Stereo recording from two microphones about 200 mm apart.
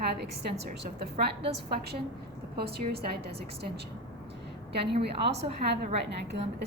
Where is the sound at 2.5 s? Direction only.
55° right (ahead or behind).